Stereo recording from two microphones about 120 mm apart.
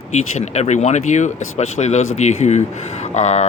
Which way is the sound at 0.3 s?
70° left (ahead or behind).